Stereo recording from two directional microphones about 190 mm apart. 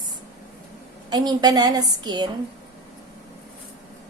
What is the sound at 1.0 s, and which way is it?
A woman's voice, 20° right (ahead or behind).